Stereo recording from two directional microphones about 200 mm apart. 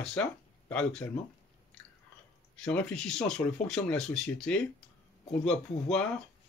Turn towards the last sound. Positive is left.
turn(degrees=5)  # may be behind; listen again after turning